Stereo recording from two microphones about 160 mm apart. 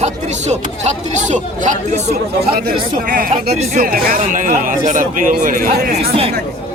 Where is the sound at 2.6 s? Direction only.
70° right (ahead or behind).